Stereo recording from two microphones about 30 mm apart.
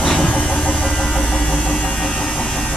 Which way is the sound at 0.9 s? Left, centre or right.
Left.